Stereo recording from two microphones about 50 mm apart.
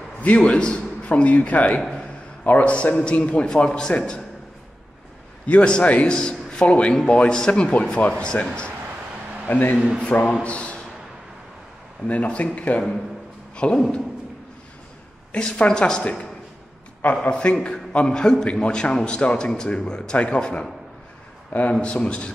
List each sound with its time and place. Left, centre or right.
0.2 s a man's voice: left
5.6 s a man's voice: left
9.5 s a man's voice: left
12.1 s a man's voice: left
15.3 s a man's voice: centre
21.5 s a man's voice: left